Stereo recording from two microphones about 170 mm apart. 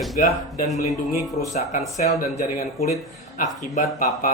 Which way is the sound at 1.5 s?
40° left (ahead or behind).